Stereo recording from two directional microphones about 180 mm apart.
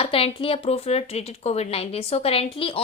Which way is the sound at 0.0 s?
30° left (ahead or behind).